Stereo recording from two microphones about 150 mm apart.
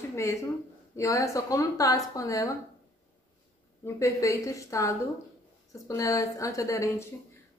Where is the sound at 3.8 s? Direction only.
20° left (ahead or behind).